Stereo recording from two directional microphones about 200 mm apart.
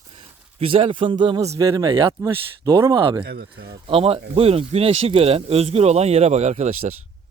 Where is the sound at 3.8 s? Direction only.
30° right (ahead or behind).